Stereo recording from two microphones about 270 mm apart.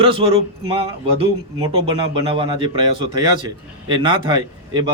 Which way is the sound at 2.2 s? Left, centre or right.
Centre.